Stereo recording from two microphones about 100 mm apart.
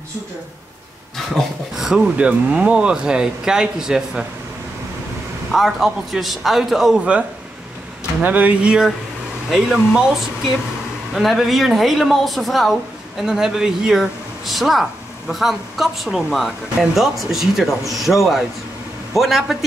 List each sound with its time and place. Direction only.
1.1 s speech: centre (ahead or behind)
5.5 s speech: centre (ahead or behind)
8.2 s speech: 15° right (ahead or behind)